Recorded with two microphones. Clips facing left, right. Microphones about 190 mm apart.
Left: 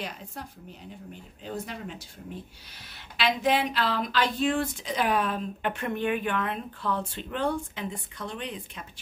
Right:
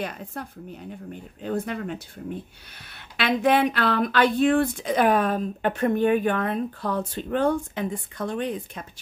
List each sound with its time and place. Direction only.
0.0 s speech: 55° right (ahead or behind)
3.2 s speech: 55° right (ahead or behind)